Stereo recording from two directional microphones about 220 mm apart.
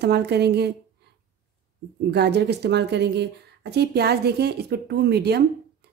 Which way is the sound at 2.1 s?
50° right (ahead or behind).